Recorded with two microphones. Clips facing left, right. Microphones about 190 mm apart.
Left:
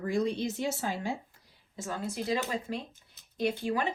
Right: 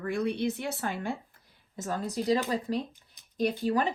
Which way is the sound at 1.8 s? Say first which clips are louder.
Right 3 dB; 40° right (ahead or behind).